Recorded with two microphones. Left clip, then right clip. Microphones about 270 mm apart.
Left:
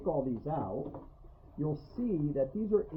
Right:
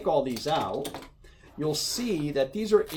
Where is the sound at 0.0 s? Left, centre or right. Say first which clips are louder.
Right 8 dB; right.